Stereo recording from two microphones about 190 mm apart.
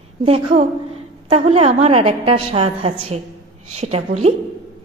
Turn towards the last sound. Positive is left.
turn(degrees=-35)  # may be behind; listen again after turning